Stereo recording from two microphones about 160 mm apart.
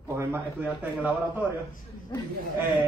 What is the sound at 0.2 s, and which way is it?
Speech, 15° right (ahead or behind).